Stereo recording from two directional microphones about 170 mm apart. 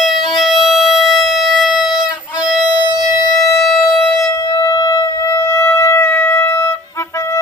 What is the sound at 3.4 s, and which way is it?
Civil defense siren, centre (ahead or behind).